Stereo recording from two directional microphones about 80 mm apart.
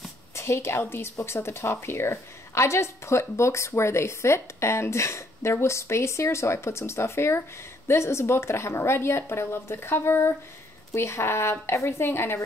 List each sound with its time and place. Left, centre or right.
0.4 s speech: left